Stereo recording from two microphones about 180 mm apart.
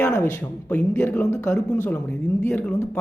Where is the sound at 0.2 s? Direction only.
10° left (ahead or behind).